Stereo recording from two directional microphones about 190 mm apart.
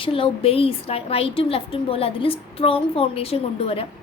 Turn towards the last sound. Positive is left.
turn(degrees=30)  # may be behind; listen again after turning